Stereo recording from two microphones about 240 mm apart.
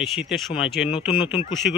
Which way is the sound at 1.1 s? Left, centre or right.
Left.